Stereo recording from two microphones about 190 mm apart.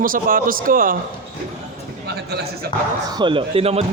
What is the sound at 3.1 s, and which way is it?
Speech, 25° right (ahead or behind).